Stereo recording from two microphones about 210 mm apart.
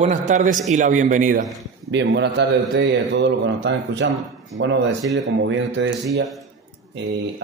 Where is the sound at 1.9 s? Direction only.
55° right (ahead or behind).